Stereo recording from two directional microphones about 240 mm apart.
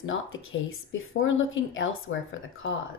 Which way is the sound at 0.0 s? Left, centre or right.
Left.